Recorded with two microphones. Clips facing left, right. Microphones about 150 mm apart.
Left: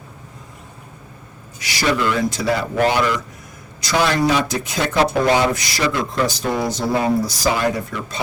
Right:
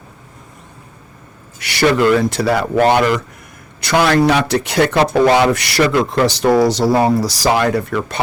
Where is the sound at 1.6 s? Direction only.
60° right (ahead or behind).